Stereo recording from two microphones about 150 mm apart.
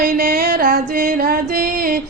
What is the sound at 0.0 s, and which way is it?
Music, 70° right (ahead or behind).